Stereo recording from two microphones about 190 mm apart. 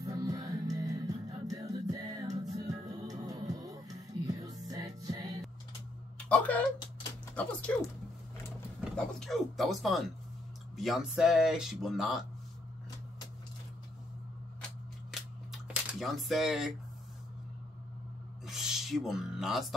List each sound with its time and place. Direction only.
0.0 s music: 20° right (ahead or behind)
6.1 s speech: 5° left (ahead or behind)
8.9 s speech: centre (ahead or behind)
15.1 s scissors: centre (ahead or behind)
15.5 s a sound: 5° right (ahead or behind)
18.4 s a sound: centre (ahead or behind)